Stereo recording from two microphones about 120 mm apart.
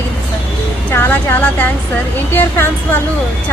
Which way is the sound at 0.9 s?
15° left (ahead or behind).